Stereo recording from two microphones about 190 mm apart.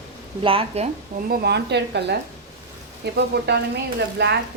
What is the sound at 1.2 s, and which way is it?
A woman's voice, 55° right (ahead or behind).